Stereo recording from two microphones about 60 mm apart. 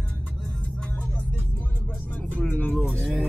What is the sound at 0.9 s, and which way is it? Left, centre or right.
Vehicle, left.